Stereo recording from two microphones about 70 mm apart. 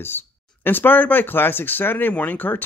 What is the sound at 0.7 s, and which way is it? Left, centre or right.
Speech, left.